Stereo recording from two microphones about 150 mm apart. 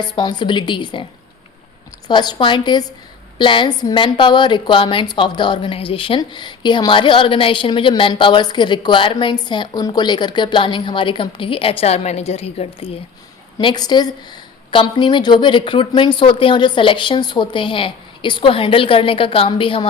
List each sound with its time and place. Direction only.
0.0 s a woman's voice: 30° left (ahead or behind)
2.0 s a woman's voice: 30° left (ahead or behind)
13.6 s a woman's voice: 30° left (ahead or behind)